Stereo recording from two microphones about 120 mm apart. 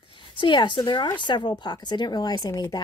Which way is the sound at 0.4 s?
40° left (ahead or behind).